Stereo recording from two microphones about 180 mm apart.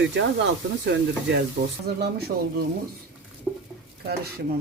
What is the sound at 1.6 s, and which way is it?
Speech, 80° right.